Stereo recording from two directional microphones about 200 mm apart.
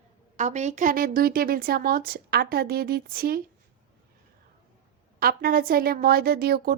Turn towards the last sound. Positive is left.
turn(degrees=-50)  # may be behind; listen again after turning